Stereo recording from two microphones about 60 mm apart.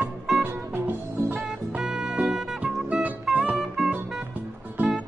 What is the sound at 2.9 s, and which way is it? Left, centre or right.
Music, centre.